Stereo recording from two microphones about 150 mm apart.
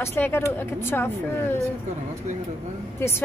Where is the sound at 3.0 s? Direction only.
15° left (ahead or behind).